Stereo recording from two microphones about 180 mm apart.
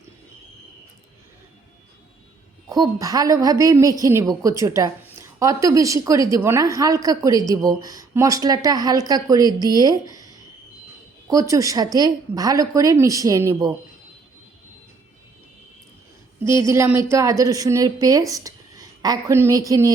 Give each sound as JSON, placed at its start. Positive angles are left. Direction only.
{"t": 2.6, "sound": "a woman's voice", "side_deg": -20}
{"t": 16.6, "sound": "a woman's voice", "side_deg": -15}